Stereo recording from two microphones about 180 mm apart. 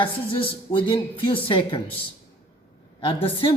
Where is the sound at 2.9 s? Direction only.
30° left (ahead or behind).